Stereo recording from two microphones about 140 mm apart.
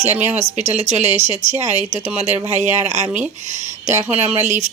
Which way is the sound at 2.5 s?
15° right (ahead or behind).